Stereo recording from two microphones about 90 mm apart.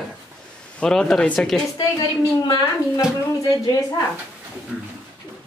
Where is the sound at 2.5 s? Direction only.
45° left (ahead or behind).